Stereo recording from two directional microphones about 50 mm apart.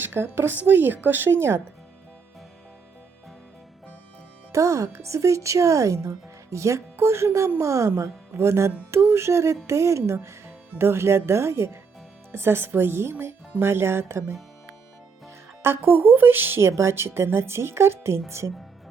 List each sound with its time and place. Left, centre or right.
0.0 s a sound: right
0.5 s speech: right
1.3 s a woman's voice: right
4.5 s speech: right
6.9 s a woman's voice: right
7.6 s a woman's voice: right
10.8 s a woman's voice: right
12.3 s a woman's voice: right
15.6 s a woman's voice: right
16.6 s a woman's voice: right